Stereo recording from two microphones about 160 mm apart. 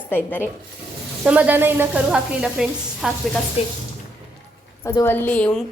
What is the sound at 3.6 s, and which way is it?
Speech, 40° left (ahead or behind).